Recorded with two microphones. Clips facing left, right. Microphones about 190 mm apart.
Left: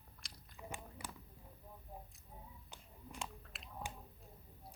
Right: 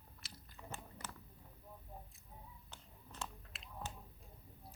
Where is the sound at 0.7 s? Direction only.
10° left (ahead or behind).